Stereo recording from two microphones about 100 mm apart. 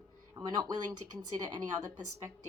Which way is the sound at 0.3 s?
45° right (ahead or behind).